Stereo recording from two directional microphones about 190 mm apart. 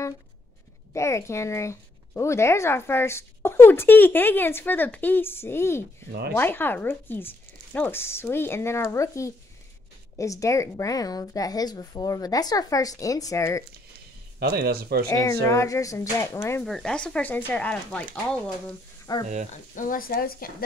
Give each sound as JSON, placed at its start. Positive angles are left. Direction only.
{"t": 0.9, "sound": "a woman's voice", "side_deg": 15}
{"t": 14.4, "sound": "speech", "side_deg": -55}
{"t": 15.0, "sound": "a woman's voice", "side_deg": 20}
{"t": 16.6, "sound": "a woman's voice", "side_deg": 5}
{"t": 19.1, "sound": "speech", "side_deg": 20}
{"t": 19.5, "sound": "speech", "side_deg": 45}